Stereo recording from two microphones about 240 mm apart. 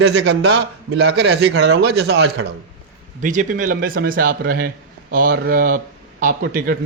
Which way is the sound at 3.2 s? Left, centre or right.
Right.